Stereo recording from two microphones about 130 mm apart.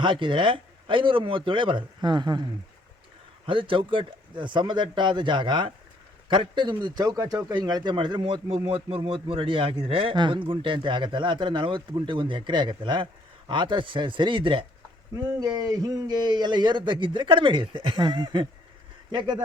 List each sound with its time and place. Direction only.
0.0 s a man's voice: 40° right (ahead or behind)
15.1 s a man's voice: 30° right (ahead or behind)